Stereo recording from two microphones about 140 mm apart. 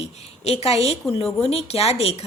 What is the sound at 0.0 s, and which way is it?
A woman's voice, 50° left (ahead or behind).